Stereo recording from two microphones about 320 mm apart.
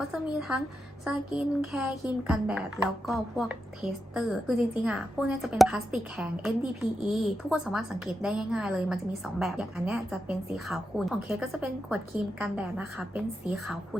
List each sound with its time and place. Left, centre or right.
0.1 s a woman's voice: centre